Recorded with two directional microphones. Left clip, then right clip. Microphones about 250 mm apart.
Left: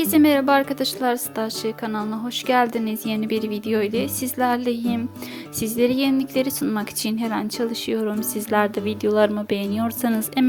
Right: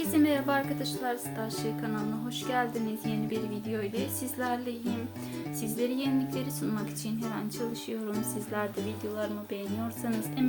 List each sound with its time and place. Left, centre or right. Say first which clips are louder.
0.0 s a woman's voice: left 10 dB; left